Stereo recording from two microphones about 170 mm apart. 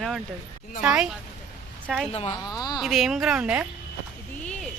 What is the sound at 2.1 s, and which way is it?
Speech, 35° left (ahead or behind).